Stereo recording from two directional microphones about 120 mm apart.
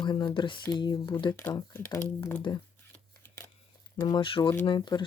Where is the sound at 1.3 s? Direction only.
15° left (ahead or behind).